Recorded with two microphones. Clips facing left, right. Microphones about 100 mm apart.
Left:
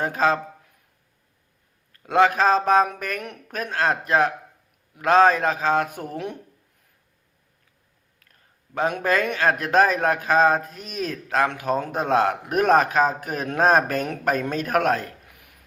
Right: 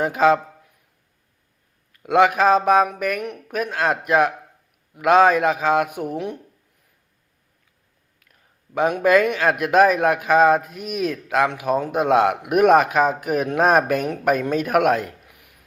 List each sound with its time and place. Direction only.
0.0 s a man's voice: 15° right (ahead or behind)
2.0 s a man's voice: 15° right (ahead or behind)
8.3 s a man's voice: 15° right (ahead or behind)
15.3 s a sound: 5° right (ahead or behind)